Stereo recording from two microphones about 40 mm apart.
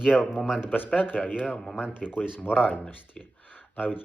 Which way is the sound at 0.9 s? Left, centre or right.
Left.